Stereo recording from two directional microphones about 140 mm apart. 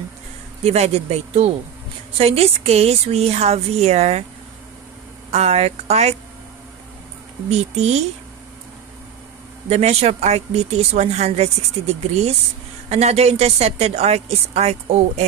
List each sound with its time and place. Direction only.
0.7 s speech: 50° right (ahead or behind)
5.3 s speech: 50° right (ahead or behind)
7.4 s speech: 50° right (ahead or behind)
9.7 s speech: 50° right (ahead or behind)